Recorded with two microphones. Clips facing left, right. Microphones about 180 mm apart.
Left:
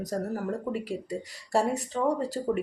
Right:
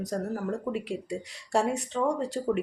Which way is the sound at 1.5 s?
Centre (ahead or behind).